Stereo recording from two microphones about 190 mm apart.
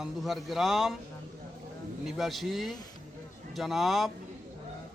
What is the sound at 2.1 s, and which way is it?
A man's voice, centre (ahead or behind).